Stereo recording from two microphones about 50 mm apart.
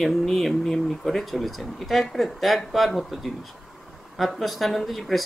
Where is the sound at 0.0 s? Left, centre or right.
Centre.